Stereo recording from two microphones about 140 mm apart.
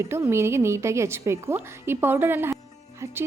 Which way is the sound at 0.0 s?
20° right (ahead or behind).